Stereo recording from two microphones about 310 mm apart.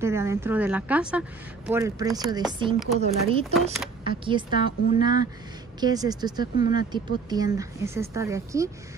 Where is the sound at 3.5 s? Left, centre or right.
Centre.